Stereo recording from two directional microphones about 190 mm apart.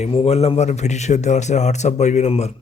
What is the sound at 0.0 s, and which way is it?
A man's voice, 30° left (ahead or behind).